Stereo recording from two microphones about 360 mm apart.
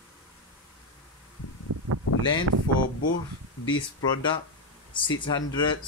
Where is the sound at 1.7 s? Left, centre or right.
Right.